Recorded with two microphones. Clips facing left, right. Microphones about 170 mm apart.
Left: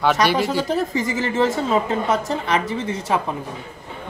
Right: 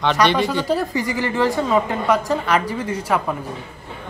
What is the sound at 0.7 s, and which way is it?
A woman's voice, 20° left (ahead or behind).